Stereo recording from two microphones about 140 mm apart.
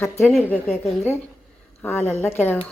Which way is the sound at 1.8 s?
15° left (ahead or behind).